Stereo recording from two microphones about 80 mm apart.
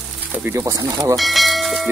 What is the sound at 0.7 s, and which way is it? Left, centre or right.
Speech, right.